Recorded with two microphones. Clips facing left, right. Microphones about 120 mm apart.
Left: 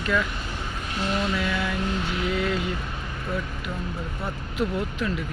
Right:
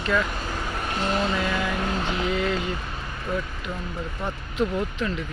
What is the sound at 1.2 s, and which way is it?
Vehicle, 40° right (ahead or behind).